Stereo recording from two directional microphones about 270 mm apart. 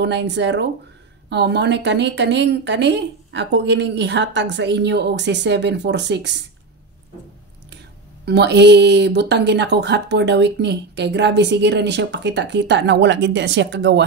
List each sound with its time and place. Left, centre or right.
0.0 s speech: right
8.3 s speech: right